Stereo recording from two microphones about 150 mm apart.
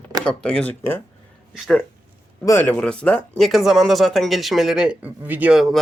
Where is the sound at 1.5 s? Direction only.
Centre (ahead or behind).